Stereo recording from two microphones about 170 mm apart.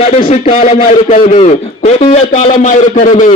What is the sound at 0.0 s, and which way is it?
Speech, 35° left (ahead or behind).